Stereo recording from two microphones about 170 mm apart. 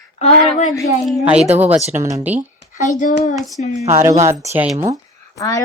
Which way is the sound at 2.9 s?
50° left (ahead or behind).